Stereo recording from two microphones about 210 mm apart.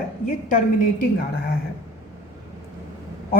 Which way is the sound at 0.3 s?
40° left (ahead or behind).